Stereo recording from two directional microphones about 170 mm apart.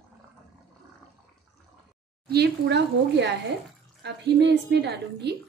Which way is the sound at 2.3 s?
75° right (ahead or behind).